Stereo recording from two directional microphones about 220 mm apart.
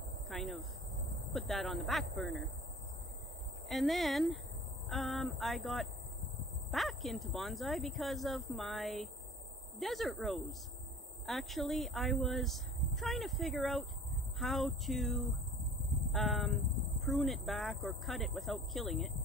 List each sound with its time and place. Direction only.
0.3 s cricket: centre (ahead or behind)
1.3 s speech: centre (ahead or behind)
3.6 s speech: centre (ahead or behind)
16.1 s crow: centre (ahead or behind)
17.0 s speech: centre (ahead or behind)